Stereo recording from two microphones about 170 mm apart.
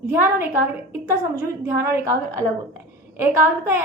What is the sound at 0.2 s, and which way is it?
Speech, 10° right (ahead or behind).